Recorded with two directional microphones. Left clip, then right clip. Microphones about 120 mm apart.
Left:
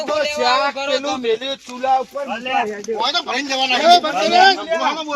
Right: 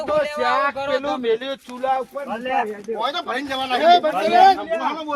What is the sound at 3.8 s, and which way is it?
Speech, 25° right (ahead or behind).